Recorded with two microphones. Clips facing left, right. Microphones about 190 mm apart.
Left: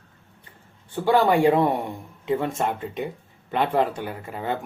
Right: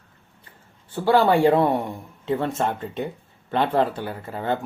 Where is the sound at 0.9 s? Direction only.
15° left (ahead or behind).